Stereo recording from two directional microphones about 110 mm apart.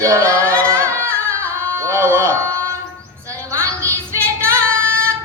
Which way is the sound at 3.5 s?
25° right (ahead or behind).